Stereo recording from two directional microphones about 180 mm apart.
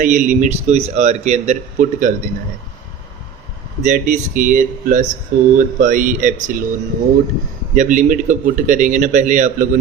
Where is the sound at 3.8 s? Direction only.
45° right (ahead or behind).